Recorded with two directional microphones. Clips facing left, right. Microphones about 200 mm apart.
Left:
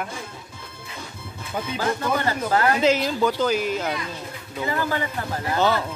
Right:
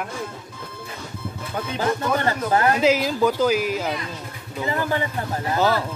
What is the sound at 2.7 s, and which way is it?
Speech, 5° right (ahead or behind).